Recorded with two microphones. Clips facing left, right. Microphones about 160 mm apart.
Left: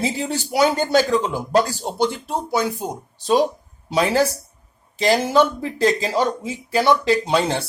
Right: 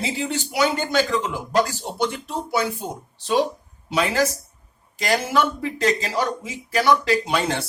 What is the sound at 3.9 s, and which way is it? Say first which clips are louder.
A man's voice: left 3 dB; 35° left (ahead or behind).